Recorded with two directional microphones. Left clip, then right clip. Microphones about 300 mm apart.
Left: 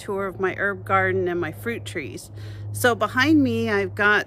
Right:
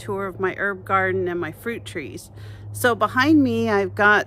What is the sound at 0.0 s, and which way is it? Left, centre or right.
A woman's voice, centre.